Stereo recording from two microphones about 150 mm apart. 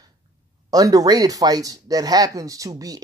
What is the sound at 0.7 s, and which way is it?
Speech, 25° right (ahead or behind).